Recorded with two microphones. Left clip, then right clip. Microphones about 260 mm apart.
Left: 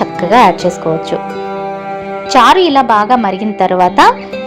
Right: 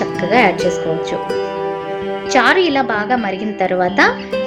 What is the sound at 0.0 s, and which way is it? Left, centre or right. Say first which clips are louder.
Speech: left 6 dB; left.